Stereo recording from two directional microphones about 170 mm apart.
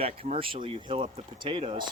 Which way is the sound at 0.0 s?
35° right (ahead or behind).